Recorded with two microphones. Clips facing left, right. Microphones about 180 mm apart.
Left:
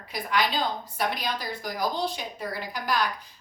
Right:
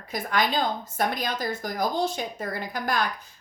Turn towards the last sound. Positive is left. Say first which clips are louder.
# right 1 dB
turn(degrees=-50)  # may be behind; listen again after turning